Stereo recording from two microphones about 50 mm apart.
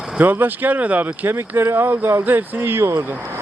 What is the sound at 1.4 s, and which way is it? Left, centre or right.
Speech, right.